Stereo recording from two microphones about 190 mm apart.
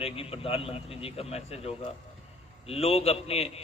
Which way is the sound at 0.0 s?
30° left (ahead or behind).